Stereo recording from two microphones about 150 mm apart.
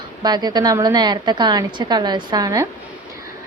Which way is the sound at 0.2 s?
30° right (ahead or behind).